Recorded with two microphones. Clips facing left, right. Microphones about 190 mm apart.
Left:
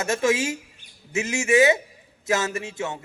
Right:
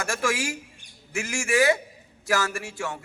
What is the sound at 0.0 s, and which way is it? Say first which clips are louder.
Speech: left 5 dB; 20° left (ahead or behind).